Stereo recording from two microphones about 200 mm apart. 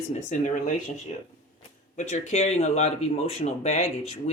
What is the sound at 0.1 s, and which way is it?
Speech, 35° left (ahead or behind).